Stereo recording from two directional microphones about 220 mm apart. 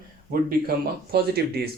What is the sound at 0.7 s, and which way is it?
Speech, 45° right (ahead or behind).